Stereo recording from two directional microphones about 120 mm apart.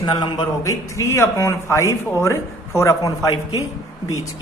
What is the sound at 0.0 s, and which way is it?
A man's voice, 35° left (ahead or behind).